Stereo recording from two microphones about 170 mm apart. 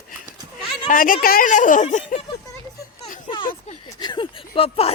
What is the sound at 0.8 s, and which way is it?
Speech, 55° left (ahead or behind).